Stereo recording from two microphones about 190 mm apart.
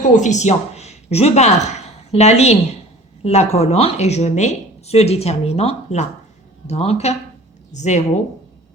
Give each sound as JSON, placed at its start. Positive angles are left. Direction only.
{"t": 0.1, "sound": "speech", "side_deg": 40}